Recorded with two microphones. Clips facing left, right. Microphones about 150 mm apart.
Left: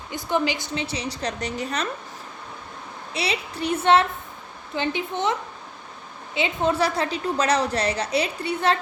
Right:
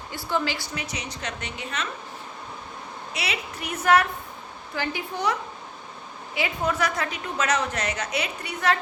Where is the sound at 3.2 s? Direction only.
30° left (ahead or behind).